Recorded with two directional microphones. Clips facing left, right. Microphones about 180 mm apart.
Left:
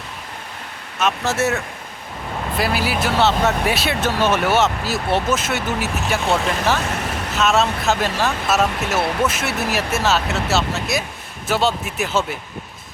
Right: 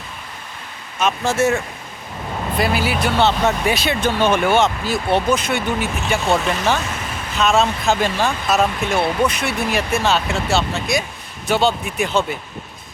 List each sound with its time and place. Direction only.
0.9 s speech: centre (ahead or behind)
6.9 s vehicle: 70° left (ahead or behind)
7.3 s speech: centre (ahead or behind)